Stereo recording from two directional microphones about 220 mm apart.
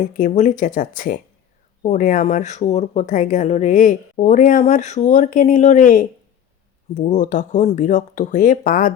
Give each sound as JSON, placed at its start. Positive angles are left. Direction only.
{"t": 0.0, "sound": "speech", "side_deg": 35}